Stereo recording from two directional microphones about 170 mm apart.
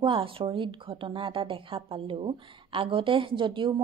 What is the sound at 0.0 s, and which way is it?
A woman's voice, 30° right (ahead or behind).